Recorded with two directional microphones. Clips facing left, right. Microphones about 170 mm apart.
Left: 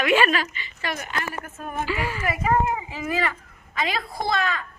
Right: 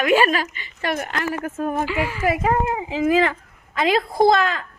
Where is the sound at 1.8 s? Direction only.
15° right (ahead or behind).